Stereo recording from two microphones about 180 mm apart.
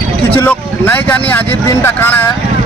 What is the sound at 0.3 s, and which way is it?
Speech, 10° left (ahead or behind).